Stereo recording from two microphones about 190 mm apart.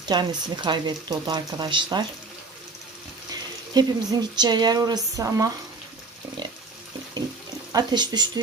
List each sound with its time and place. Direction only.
0.0 s speech: 20° right (ahead or behind)
3.8 s speech: 20° right (ahead or behind)
7.7 s speech: 20° right (ahead or behind)